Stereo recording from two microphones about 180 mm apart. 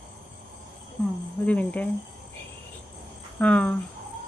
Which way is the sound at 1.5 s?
10° left (ahead or behind).